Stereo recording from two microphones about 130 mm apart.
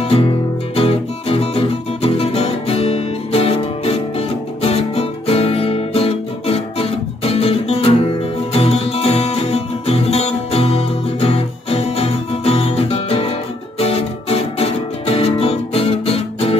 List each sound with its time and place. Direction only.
0.0 s music: 45° left (ahead or behind)
4.6 s guitar: 50° left (ahead or behind)
13.7 s music: 50° left (ahead or behind)